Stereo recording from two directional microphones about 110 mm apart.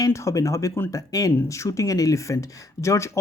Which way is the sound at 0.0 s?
30° left (ahead or behind).